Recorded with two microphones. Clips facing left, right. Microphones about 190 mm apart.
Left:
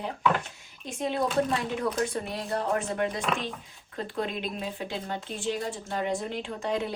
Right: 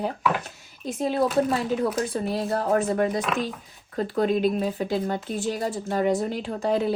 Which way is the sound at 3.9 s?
40° right (ahead or behind).